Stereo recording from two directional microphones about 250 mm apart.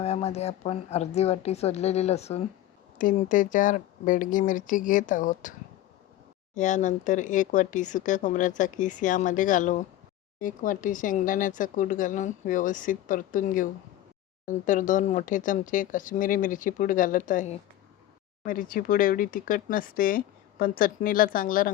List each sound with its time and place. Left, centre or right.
0.0 s a woman's voice: left